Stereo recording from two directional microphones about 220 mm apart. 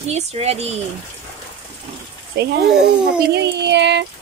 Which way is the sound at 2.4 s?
50° right (ahead or behind).